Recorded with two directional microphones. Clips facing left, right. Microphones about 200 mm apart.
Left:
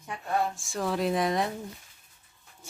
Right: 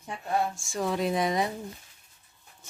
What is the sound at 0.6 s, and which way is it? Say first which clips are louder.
Speech: even; centre (ahead or behind).